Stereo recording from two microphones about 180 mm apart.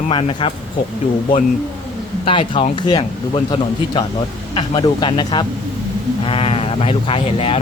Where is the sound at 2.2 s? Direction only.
30° left (ahead or behind).